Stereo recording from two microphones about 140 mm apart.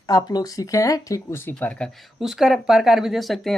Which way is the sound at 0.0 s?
25° left (ahead or behind).